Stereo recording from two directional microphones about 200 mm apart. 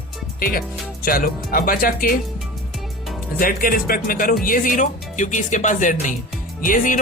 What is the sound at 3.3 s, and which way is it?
Speech, 45° left (ahead or behind).